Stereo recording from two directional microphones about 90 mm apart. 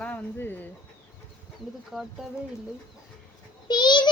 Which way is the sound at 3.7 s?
55° left (ahead or behind).